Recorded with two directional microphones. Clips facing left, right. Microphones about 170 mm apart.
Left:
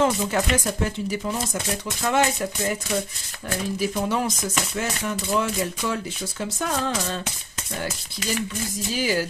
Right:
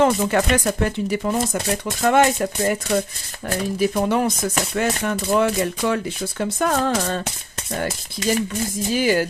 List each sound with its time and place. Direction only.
0.0 s speech: 60° right (ahead or behind)
8.2 s speech: 40° right (ahead or behind)
8.9 s speech: 55° right (ahead or behind)